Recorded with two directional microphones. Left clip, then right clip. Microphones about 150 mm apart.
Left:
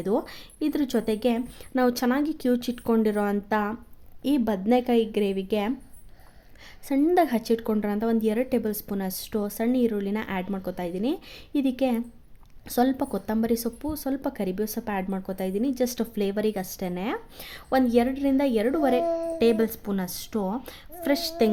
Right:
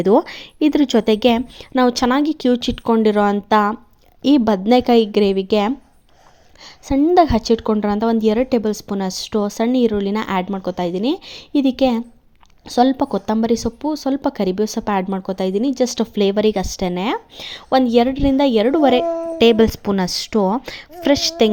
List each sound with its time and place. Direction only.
0.0 s speech: 30° right (ahead or behind)
6.8 s speech: 20° right (ahead or behind)